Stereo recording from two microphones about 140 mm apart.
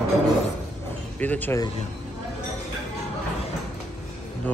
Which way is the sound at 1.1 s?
10° left (ahead or behind).